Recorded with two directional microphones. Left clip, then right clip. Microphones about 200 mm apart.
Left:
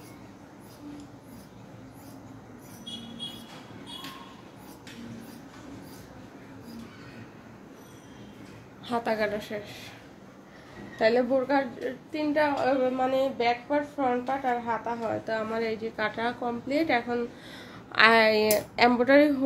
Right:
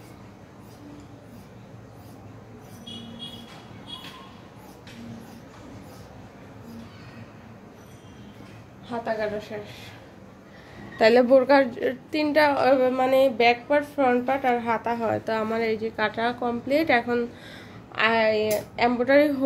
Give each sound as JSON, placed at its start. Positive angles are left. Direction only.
{"t": 8.8, "sound": "a woman's voice", "side_deg": 40}
{"t": 11.0, "sound": "a woman's voice", "side_deg": -35}
{"t": 17.9, "sound": "a woman's voice", "side_deg": 20}